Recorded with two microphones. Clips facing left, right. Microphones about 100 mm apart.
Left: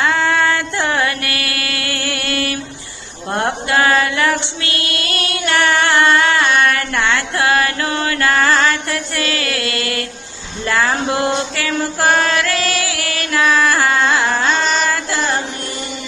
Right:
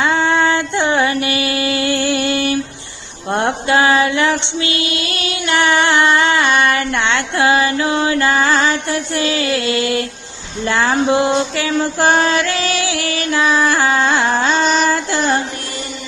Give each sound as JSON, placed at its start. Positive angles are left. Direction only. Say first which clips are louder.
{"t": 0.0, "sound": "music", "louder": "right 1 dB", "side_deg": -20}
{"t": 1.2, "sound": "mantra", "louder": "right 6 dB", "side_deg": -20}
{"t": 3.2, "sound": "female singing", "louder": "right 2 dB", "side_deg": -20}
{"t": 5.5, "sound": "music", "louder": "right 1 dB", "side_deg": -20}
{"t": 13.6, "sound": "a sound", "louder": "even", "side_deg": -25}
{"t": 14.9, "sound": "music", "louder": "right 3 dB", "side_deg": -30}